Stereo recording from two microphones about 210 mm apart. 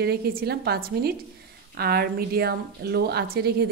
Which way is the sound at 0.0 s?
50° right (ahead or behind).